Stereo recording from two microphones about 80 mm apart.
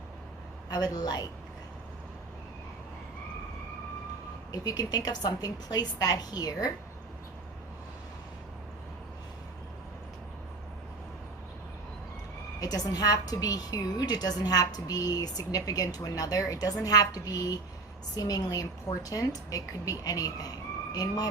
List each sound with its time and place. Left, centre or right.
0.7 s speech: left
4.5 s a woman's voice: left
12.5 s a woman's voice: left